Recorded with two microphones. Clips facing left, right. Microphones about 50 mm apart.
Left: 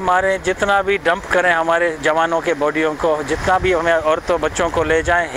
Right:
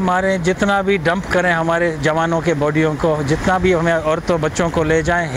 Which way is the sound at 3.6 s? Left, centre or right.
Left.